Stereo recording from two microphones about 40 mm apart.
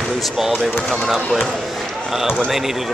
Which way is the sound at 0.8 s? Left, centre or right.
Centre.